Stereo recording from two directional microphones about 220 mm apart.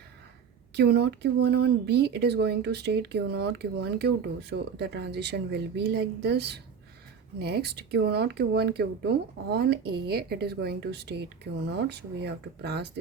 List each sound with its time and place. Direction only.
0.8 s speech: 50° right (ahead or behind)